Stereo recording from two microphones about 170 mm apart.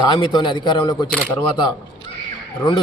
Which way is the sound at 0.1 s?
25° left (ahead or behind).